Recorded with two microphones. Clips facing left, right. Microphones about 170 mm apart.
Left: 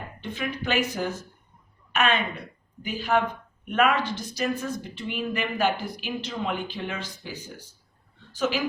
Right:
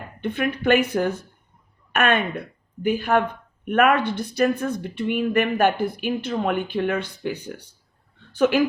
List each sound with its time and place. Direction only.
0.2 s speech: 60° right (ahead or behind)